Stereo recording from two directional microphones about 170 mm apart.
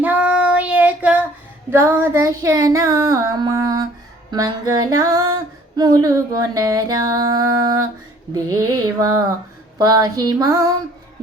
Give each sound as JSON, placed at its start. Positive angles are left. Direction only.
{"t": 0.0, "sound": "child singing", "side_deg": -10}
{"t": 1.7, "sound": "female singing", "side_deg": -15}